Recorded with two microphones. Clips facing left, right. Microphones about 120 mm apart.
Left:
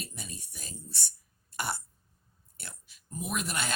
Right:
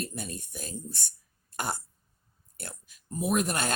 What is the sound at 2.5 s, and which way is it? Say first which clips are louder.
Speech: right 6 dB; 45° right (ahead or behind).